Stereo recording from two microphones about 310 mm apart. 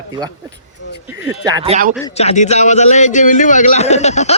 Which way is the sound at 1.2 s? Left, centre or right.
Centre.